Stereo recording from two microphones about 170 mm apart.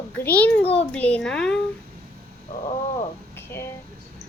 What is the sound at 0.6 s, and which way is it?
Speech, 35° left (ahead or behind).